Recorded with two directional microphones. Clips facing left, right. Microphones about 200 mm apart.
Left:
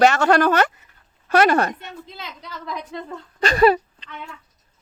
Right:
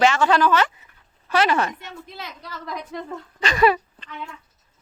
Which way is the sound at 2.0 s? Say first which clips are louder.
Even; 25° left (ahead or behind).